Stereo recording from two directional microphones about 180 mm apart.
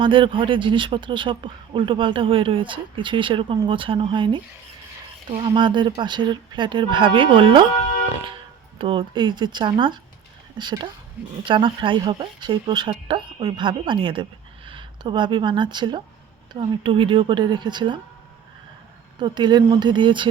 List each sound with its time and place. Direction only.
0.0 s speech: 30° right (ahead or behind)
8.8 s speech: 25° right (ahead or behind)
19.2 s speech: 25° right (ahead or behind)